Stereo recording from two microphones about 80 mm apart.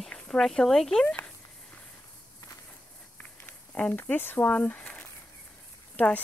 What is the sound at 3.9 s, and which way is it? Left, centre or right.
Speech, left.